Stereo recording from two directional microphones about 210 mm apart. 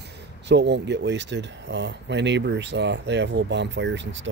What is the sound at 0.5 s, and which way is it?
Speech, 55° right (ahead or behind).